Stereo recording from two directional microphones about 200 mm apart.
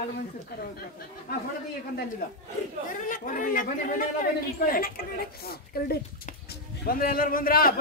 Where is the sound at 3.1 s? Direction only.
40° left (ahead or behind).